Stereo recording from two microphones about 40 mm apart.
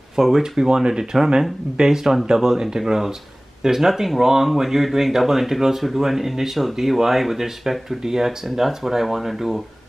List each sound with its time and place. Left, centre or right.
0.1 s speech: centre